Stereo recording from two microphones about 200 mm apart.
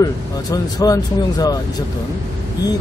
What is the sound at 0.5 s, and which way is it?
Speech, 20° left (ahead or behind).